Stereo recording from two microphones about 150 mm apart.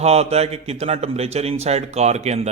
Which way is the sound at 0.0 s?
45° right (ahead or behind).